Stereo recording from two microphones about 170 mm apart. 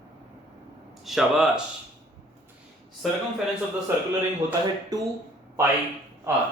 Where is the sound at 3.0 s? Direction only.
Centre (ahead or behind).